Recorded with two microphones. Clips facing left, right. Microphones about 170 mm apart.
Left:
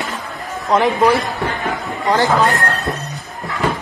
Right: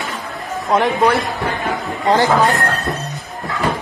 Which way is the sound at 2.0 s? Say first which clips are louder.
Right 1 dB; 20° right (ahead or behind).